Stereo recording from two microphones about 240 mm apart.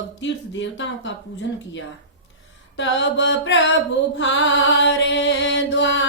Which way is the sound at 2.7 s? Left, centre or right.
Left.